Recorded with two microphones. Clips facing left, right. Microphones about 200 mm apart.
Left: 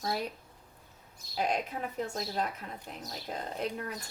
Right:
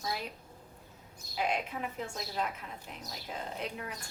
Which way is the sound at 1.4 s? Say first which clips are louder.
Left 2 dB; 40° left (ahead or behind).